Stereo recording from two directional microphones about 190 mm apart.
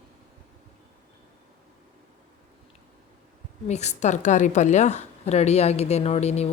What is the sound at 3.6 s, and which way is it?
Speech, 35° left (ahead or behind).